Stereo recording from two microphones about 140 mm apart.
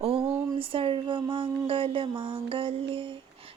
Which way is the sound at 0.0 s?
40° right (ahead or behind).